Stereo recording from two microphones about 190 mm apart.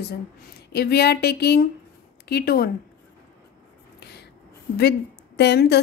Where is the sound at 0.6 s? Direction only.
55° left (ahead or behind).